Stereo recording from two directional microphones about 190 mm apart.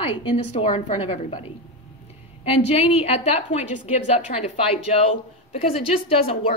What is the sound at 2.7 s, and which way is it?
A woman's voice, 30° left (ahead or behind).